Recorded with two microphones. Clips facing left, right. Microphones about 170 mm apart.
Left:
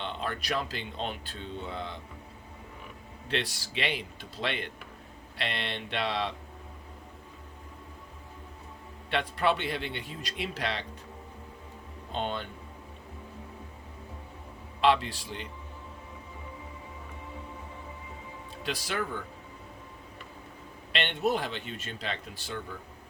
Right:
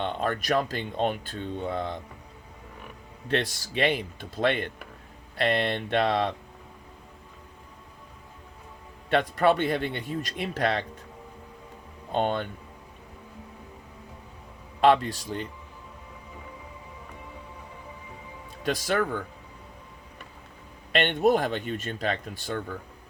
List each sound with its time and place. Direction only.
0.0 s speech: 45° right (ahead or behind)
3.2 s speech: 45° right (ahead or behind)
9.0 s speech: 45° right (ahead or behind)
12.1 s speech: 50° right (ahead or behind)
14.8 s speech: 45° right (ahead or behind)
18.6 s speech: 45° right (ahead or behind)
20.9 s speech: 50° right (ahead or behind)